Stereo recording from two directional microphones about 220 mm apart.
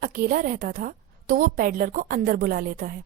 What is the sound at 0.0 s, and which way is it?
A woman's voice, 40° right (ahead or behind).